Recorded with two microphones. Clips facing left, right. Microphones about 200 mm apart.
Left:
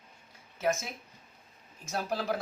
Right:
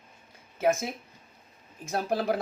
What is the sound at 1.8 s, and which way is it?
Speech, 55° right (ahead or behind).